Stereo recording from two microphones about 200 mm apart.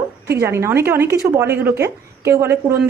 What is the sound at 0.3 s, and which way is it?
A woman's voice, 15° right (ahead or behind).